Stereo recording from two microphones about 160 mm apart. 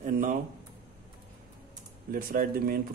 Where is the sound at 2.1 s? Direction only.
60° right (ahead or behind).